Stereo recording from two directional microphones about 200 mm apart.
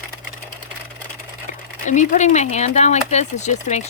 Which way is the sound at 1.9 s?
35° left (ahead or behind).